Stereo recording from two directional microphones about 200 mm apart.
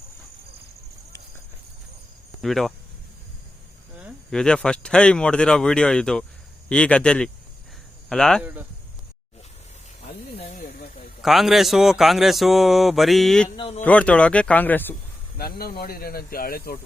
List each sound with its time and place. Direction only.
2.4 s speech: centre (ahead or behind)
4.0 s speech: 5° left (ahead or behind)
10.3 s snake: 35° left (ahead or behind)
11.2 s speech: centre (ahead or behind)
13.6 s speech: 25° left (ahead or behind)
13.8 s speech: 5° left (ahead or behind)
15.4 s speech: 50° left (ahead or behind)